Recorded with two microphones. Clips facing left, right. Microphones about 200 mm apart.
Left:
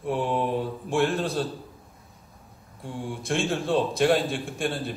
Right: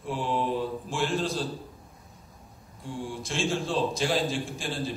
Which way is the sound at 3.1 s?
60° left (ahead or behind).